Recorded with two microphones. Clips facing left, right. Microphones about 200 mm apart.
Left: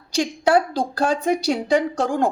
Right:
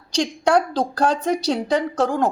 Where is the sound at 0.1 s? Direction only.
5° left (ahead or behind).